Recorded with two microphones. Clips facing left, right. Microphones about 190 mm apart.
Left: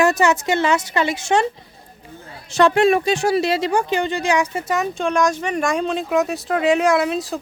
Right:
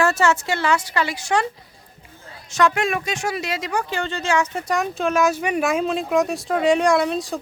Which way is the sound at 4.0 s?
15° left (ahead or behind).